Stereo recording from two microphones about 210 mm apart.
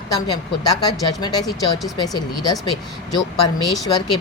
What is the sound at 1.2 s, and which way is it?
A woman's voice, 20° left (ahead or behind).